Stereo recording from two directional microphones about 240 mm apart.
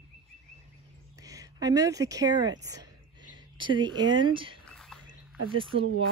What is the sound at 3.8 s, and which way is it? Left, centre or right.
Speech, centre.